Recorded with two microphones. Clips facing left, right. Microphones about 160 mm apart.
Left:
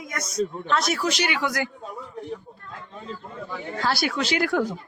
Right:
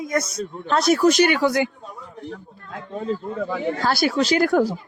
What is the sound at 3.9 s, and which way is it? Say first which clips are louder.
Speech: right 4 dB; 45° right (ahead or behind).